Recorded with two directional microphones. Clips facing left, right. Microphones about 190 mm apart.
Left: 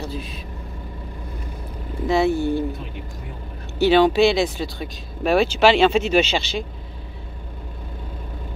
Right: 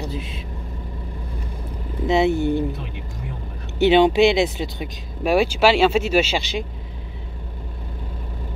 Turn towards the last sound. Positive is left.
turn(degrees=-15)  # may be behind; listen again after turning